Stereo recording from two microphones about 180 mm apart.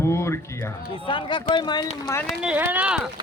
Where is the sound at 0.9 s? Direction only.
25° left (ahead or behind).